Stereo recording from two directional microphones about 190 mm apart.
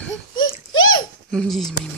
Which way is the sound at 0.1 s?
90° left.